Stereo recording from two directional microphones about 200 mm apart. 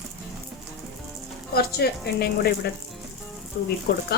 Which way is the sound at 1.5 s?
50° left (ahead or behind).